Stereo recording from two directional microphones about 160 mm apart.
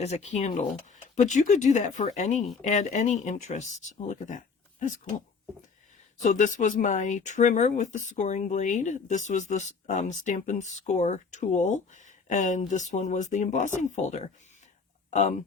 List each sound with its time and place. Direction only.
0.0 s speech: 45° left (ahead or behind)
6.2 s speech: 50° left (ahead or behind)